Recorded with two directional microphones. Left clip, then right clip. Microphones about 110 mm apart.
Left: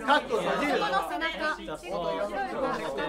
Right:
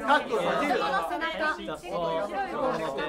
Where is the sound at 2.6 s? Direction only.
35° left (ahead or behind).